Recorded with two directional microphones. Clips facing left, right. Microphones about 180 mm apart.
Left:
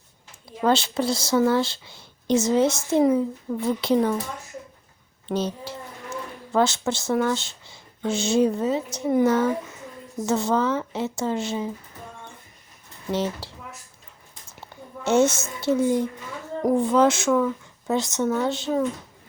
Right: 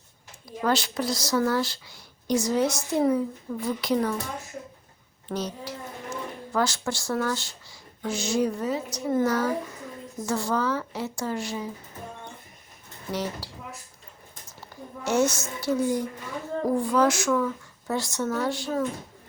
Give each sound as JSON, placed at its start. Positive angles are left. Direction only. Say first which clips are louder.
{"t": 0.6, "sound": "speech", "louder": "left 4 dB", "side_deg": 25}
{"t": 5.3, "sound": "speech", "louder": "left 4 dB", "side_deg": 30}
{"t": 13.1, "sound": "speech", "louder": "left 5 dB", "side_deg": 25}
{"t": 14.7, "sound": "a sound", "louder": "right 2 dB", "side_deg": 25}
{"t": 15.0, "sound": "speech", "louder": "left 4 dB", "side_deg": 25}